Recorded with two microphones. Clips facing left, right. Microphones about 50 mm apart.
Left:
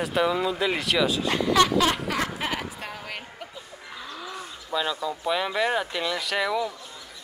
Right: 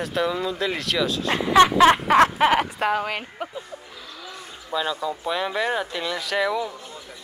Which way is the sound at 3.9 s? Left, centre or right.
Centre.